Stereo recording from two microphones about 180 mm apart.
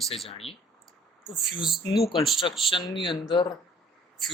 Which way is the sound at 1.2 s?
Centre (ahead or behind).